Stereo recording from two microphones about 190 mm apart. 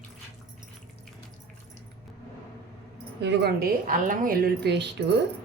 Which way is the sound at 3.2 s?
60° right (ahead or behind).